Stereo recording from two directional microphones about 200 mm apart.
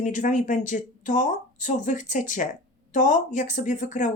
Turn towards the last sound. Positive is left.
turn(degrees=40)  # may be behind; listen again after turning